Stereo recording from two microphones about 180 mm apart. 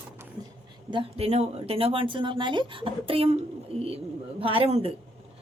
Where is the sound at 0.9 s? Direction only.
30° right (ahead or behind).